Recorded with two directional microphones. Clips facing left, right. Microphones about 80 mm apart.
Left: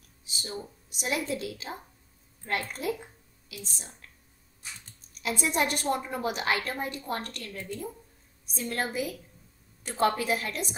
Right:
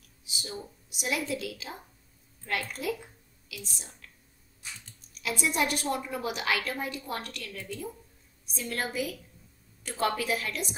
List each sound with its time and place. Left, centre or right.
0.9 s a woman's voice: left
5.2 s a woman's voice: left